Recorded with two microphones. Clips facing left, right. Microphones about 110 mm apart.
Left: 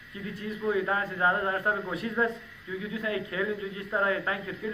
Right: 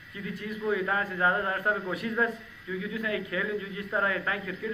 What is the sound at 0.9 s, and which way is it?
A man's voice, 25° left (ahead or behind).